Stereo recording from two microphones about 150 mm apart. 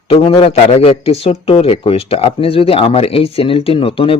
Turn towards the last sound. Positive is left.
turn(degrees=40)  # may be behind; listen again after turning